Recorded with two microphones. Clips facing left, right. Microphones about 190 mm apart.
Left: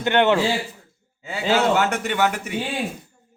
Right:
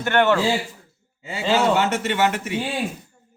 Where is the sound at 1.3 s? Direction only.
Centre (ahead or behind).